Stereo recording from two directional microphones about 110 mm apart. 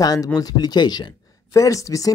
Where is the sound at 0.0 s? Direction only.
35° left (ahead or behind).